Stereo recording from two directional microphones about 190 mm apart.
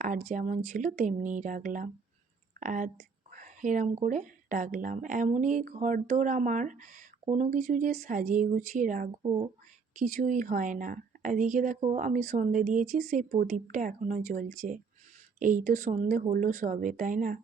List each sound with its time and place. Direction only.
0.0 s speech: 40° right (ahead or behind)
3.3 s whispering: 45° right (ahead or behind)
4.0 s speech: 40° right (ahead or behind)
9.2 s speech: 25° right (ahead or behind)
9.9 s speech: 40° right (ahead or behind)